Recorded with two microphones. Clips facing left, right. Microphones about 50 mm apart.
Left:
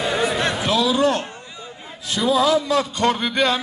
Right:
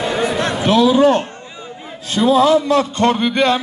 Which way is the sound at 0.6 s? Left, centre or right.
Right.